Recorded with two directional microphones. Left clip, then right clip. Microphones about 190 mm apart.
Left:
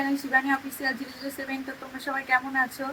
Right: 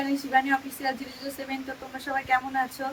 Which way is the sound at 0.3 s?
10° right (ahead or behind).